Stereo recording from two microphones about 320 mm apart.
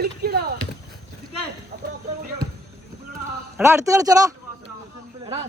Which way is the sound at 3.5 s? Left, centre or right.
Centre.